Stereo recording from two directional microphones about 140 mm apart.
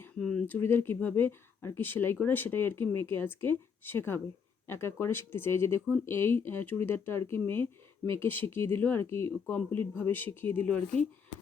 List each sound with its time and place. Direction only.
0.0 s speech: 5° left (ahead or behind)